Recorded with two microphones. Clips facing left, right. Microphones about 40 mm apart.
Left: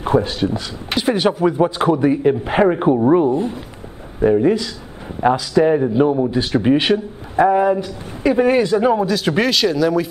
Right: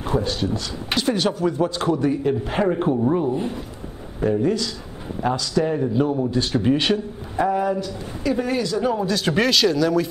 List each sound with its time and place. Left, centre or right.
0.0 s a man's voice: left
9.0 s speech: centre